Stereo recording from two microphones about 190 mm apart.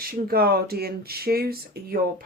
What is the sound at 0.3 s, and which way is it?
Speech, 55° right (ahead or behind).